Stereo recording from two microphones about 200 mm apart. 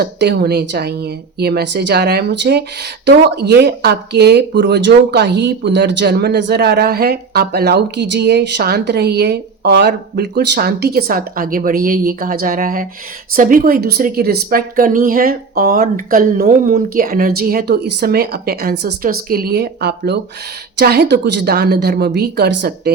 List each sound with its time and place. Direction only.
0.0 s a woman's voice: 55° right (ahead or behind)